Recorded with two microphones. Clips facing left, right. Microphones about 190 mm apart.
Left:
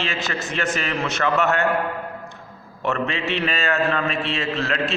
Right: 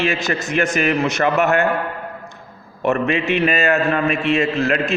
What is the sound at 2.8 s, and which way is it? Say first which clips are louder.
A man's voice: right 6 dB; 15° right (ahead or behind).